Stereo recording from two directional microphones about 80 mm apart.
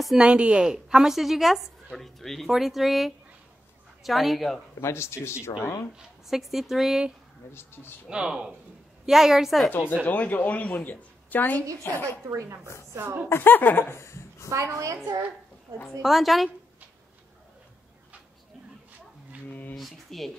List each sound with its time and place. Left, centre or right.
0.2 s a woman's voice: centre
4.7 s speech: left
5.9 s a woman's voice: centre
7.5 s a woman's voice: left
8.1 s a woman's voice: centre
9.7 s a woman's voice: left
12.3 s a woman's voice: right
13.0 s a woman's voice: right
13.3 s a woman's voice: left
14.5 s a woman's voice: right
16.0 s a woman's voice: centre
19.7 s a woman's voice: centre